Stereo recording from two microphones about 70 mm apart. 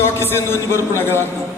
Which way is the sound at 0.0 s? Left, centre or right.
Left.